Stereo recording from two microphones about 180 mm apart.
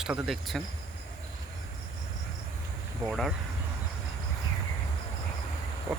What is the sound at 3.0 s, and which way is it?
Speech, centre (ahead or behind).